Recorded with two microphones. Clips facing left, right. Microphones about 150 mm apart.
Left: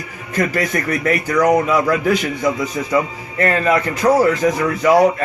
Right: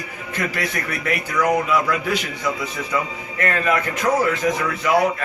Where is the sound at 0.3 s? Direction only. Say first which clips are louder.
Left 7 dB; 45° left (ahead or behind).